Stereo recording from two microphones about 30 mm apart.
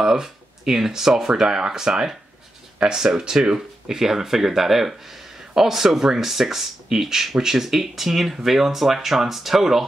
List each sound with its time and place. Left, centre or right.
0.0 s speech: right